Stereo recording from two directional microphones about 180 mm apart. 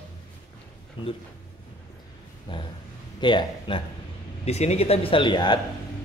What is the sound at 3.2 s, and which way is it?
A man's voice, 25° left (ahead or behind).